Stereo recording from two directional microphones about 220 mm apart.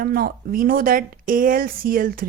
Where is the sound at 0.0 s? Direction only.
40° right (ahead or behind).